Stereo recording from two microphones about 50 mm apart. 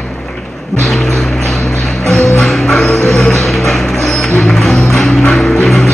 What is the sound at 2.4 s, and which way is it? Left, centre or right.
Music, centre.